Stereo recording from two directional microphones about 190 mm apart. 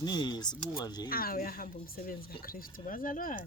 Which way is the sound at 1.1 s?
50° left (ahead or behind).